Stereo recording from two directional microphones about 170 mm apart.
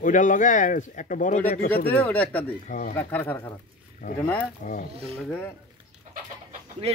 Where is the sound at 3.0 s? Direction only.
10° left (ahead or behind).